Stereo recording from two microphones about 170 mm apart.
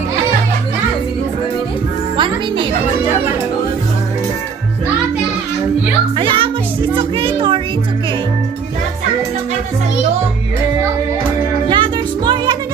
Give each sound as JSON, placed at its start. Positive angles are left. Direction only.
{"t": 2.1, "sound": "music", "side_deg": -30}
{"t": 6.1, "sound": "music", "side_deg": -30}
{"t": 11.7, "sound": "music", "side_deg": -25}